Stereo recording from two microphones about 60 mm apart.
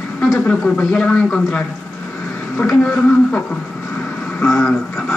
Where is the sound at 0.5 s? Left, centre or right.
Left.